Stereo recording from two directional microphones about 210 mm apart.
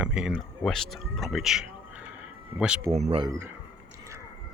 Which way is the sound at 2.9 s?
30° right (ahead or behind).